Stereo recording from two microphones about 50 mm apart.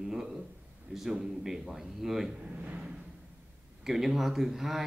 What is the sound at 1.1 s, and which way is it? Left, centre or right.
Speech, centre.